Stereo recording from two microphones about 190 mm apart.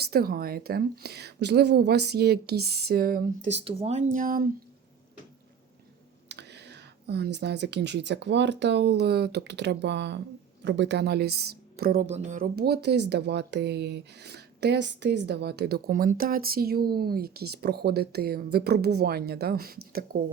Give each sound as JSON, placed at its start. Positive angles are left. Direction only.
{"t": 0.0, "sound": "speech", "side_deg": -55}
{"t": 3.5, "sound": "speech", "side_deg": -30}
{"t": 6.2, "sound": "a woman's voice", "side_deg": -60}
{"t": 12.0, "sound": "speech", "side_deg": -35}